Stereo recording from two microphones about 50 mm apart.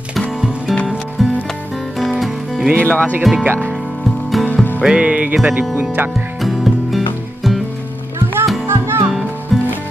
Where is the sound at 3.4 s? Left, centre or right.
Right.